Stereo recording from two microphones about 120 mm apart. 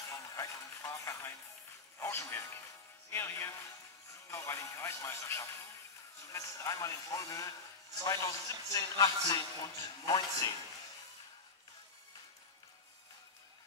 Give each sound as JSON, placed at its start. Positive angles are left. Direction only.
{"t": 0.1, "sound": "a sound", "side_deg": 25}
{"t": 2.0, "sound": "music", "side_deg": 20}
{"t": 3.1, "sound": "a man's voice", "side_deg": 20}